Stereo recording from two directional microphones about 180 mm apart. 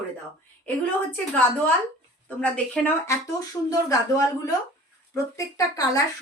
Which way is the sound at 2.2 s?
10° left (ahead or behind).